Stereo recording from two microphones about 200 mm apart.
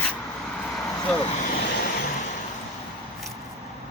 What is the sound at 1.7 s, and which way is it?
Vehicle, 55° left (ahead or behind).